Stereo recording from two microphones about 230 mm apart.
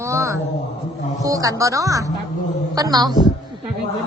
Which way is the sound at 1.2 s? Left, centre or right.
Centre.